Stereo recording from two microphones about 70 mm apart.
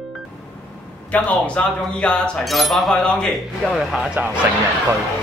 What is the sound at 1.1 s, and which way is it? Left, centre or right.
Speech, centre.